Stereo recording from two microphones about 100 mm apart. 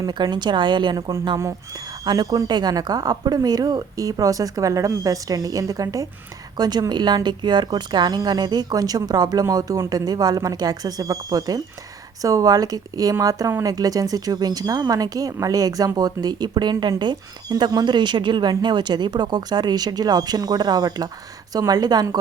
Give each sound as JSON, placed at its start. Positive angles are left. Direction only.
{"t": 0.0, "sound": "speech", "side_deg": -45}
{"t": 1.4, "sound": "speech", "side_deg": -30}